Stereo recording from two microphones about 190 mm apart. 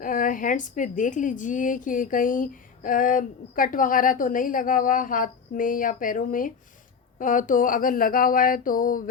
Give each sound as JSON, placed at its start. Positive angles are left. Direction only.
{"t": 0.0, "sound": "a woman's voice", "side_deg": 45}